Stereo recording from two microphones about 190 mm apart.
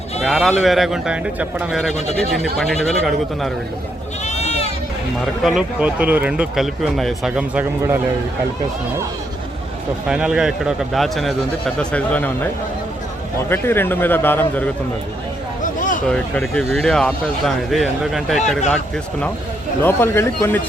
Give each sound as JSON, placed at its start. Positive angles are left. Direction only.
{"t": 0.3, "sound": "speech", "side_deg": 0}
{"t": 4.3, "sound": "sheep", "side_deg": 35}
{"t": 5.2, "sound": "speech", "side_deg": 0}
{"t": 10.1, "sound": "speech", "side_deg": -5}
{"t": 13.5, "sound": "speech", "side_deg": 10}
{"t": 15.6, "sound": "a sound", "side_deg": 45}
{"t": 16.0, "sound": "speech", "side_deg": 5}
{"t": 19.8, "sound": "speech", "side_deg": 10}